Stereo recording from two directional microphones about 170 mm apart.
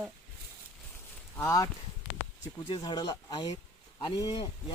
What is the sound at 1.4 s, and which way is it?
Speech, 20° left (ahead or behind).